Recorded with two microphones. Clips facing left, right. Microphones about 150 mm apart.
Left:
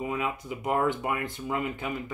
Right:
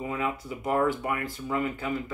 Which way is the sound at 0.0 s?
20° left (ahead or behind).